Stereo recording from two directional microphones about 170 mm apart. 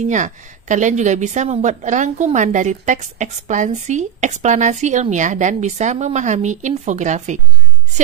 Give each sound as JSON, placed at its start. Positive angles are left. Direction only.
{"t": 0.0, "sound": "a woman's voice", "side_deg": -45}